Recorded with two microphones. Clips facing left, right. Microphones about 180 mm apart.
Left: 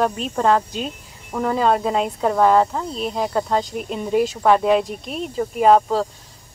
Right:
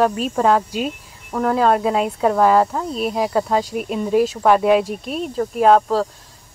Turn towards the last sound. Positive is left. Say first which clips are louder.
# right 1 dB
turn(degrees=0)  # may be behind; listen again after turning